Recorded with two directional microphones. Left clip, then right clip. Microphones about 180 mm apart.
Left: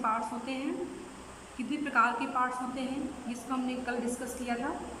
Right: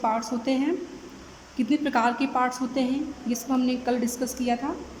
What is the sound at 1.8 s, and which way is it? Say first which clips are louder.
A woman's voice: right 1 dB; 40° right (ahead or behind).